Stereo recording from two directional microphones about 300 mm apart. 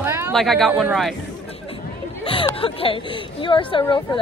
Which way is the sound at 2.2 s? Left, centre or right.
Centre.